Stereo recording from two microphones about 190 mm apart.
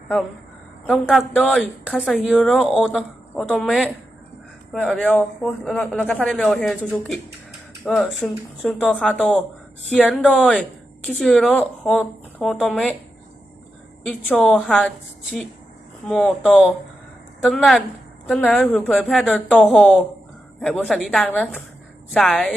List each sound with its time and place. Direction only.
0.9 s speech: centre (ahead or behind)
14.3 s speech: centre (ahead or behind)